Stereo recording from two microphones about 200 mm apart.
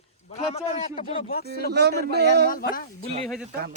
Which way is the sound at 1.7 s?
55° right (ahead or behind).